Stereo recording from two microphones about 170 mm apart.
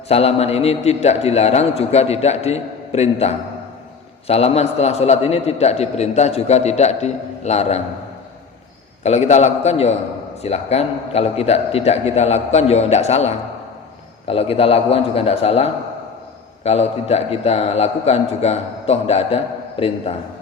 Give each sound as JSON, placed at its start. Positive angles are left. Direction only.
{"t": 0.1, "sound": "a man's voice", "side_deg": 35}
{"t": 9.0, "sound": "a man's voice", "side_deg": 40}